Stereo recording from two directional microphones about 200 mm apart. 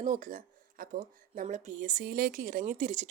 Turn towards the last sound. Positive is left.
turn(degrees=-40)  # may be behind; listen again after turning